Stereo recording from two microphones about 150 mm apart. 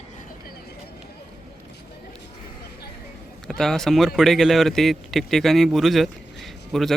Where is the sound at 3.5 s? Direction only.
Centre (ahead or behind).